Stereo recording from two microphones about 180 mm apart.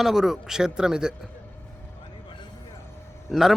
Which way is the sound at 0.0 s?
Centre (ahead or behind).